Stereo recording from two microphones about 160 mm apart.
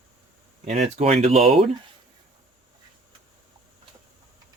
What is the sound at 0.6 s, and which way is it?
Speech, 40° right (ahead or behind).